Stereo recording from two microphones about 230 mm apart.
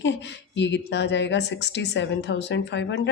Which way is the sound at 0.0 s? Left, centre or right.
Left.